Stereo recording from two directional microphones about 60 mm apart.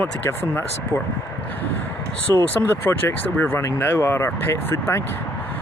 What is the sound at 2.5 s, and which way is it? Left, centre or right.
Speech, left.